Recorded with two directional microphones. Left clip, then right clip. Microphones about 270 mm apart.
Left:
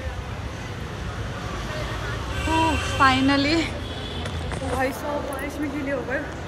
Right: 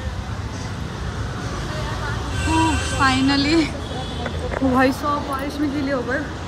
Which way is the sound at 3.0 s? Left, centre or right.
Centre.